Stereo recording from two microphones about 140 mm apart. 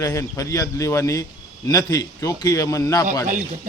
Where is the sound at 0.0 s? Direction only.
20° left (ahead or behind).